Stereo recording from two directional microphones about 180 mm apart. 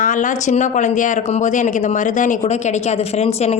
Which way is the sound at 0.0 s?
45° left (ahead or behind).